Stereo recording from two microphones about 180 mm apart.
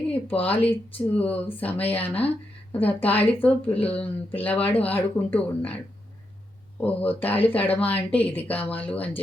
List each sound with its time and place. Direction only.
0.1 s speech: 10° left (ahead or behind)
2.1 s speech: 35° left (ahead or behind)
2.7 s speech: 10° left (ahead or behind)